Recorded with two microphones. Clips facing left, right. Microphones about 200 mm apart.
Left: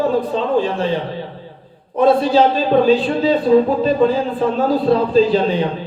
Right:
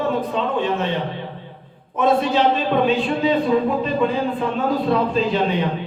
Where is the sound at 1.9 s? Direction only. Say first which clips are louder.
Left 5 dB; 35° left (ahead or behind).